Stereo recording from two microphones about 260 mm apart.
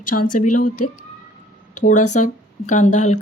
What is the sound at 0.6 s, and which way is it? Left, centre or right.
Speech, left.